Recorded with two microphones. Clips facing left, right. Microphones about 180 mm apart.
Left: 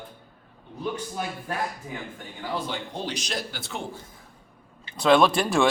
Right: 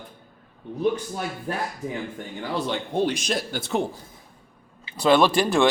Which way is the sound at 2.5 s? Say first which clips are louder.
Right 7 dB; 60° right (ahead or behind).